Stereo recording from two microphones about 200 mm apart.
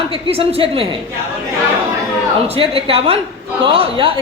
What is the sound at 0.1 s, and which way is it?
Speech, 30° right (ahead or behind).